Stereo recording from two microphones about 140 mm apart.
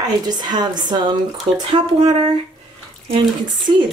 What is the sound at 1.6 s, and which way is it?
Speech, 45° right (ahead or behind).